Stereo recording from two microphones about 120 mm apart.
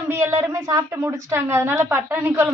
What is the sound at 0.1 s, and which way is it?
A woman's voice, 20° right (ahead or behind).